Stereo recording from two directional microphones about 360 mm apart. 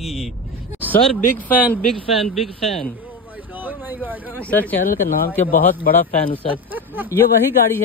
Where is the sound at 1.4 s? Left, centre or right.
Centre.